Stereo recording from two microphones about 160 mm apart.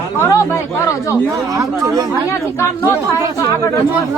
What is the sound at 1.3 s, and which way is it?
Speech, 20° right (ahead or behind).